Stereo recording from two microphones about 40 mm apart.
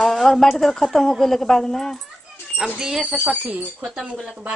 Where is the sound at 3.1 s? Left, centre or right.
Right.